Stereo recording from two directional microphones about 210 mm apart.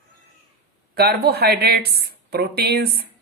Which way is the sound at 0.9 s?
50° right (ahead or behind).